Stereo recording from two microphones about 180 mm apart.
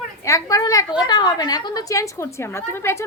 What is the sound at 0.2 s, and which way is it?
A woman's voice, 15° left (ahead or behind).